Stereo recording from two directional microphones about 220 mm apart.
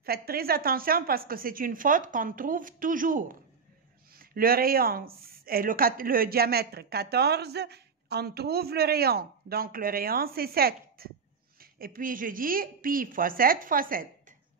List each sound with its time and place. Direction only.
0.0 s a woman's voice: 45° right (ahead or behind)